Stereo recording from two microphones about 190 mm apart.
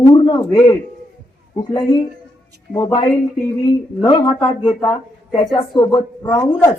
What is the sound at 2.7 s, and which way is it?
A man's voice, 20° left (ahead or behind).